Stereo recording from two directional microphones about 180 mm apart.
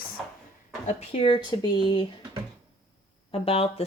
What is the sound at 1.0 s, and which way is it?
Speech, 30° left (ahead or behind).